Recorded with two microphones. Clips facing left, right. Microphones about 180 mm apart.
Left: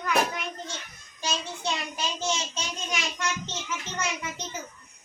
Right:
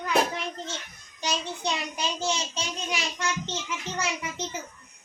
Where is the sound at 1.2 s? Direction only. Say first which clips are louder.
Right 2 dB; 15° right (ahead or behind).